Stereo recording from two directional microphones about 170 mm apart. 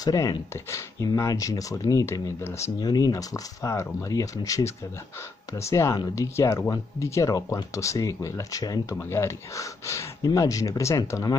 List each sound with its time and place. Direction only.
0.0 s speech: 20° left (ahead or behind)